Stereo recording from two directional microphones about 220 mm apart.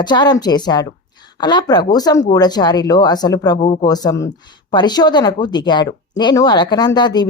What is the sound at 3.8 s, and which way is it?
Speech, 15° left (ahead or behind).